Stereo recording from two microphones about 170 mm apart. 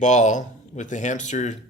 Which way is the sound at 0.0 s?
45° left (ahead or behind).